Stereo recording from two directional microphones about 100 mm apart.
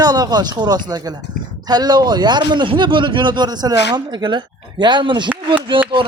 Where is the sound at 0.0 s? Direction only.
40° right (ahead or behind).